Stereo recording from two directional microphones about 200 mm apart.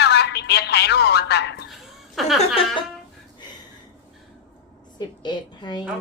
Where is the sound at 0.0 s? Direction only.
55° left (ahead or behind).